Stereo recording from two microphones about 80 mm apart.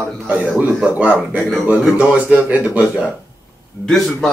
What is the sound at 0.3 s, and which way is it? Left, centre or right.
A man's voice, centre.